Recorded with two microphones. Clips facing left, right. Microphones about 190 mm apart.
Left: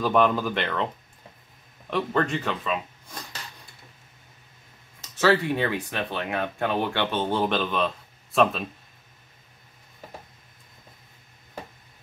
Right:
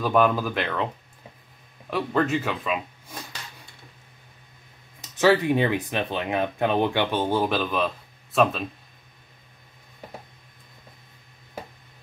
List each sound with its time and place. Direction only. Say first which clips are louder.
0.0 s speech: right 1 dB; centre (ahead or behind)
1.9 s speech: right 1 dB; 5° right (ahead or behind)
5.1 s speech: right 2 dB; 20° right (ahead or behind); by 8.6 s centre (ahead or behind)